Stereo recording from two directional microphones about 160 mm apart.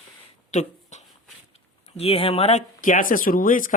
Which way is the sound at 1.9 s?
35° left (ahead or behind).